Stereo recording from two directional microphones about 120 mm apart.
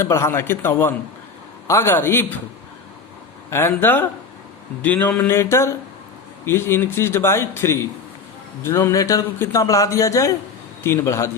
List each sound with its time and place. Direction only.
0.0 s a man's voice: 20° left (ahead or behind)
3.5 s a sound: 20° left (ahead or behind)
6.4 s a man's voice: 20° left (ahead or behind)